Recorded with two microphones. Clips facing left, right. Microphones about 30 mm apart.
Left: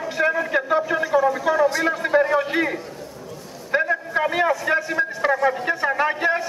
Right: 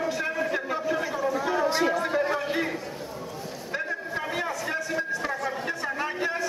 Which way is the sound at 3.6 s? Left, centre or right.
Left.